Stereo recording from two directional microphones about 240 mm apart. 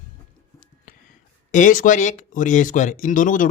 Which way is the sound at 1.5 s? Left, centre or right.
Left.